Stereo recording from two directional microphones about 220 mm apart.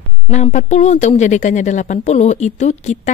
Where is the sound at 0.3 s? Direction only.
30° left (ahead or behind).